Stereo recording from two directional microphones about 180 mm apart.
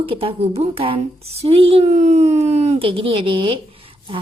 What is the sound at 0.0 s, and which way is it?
A woman's voice, 30° right (ahead or behind).